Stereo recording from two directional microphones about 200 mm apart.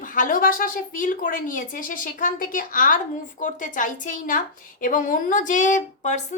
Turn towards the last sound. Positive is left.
turn(degrees=35)  # may be behind; listen again after turning